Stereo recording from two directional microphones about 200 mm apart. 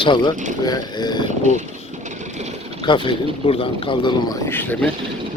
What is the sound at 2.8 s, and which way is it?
Speech, 25° left (ahead or behind).